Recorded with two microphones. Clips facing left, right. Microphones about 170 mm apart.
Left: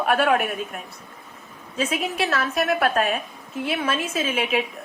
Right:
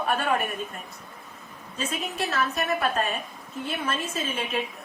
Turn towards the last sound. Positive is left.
turn(degrees=80)